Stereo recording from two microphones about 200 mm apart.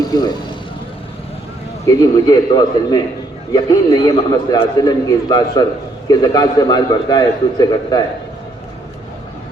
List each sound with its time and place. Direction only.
0.1 s speech: 20° left (ahead or behind)
1.9 s a man's voice: 20° left (ahead or behind)